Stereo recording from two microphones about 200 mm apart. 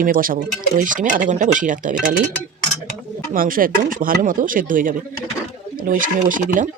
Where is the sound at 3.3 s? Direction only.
45° right (ahead or behind).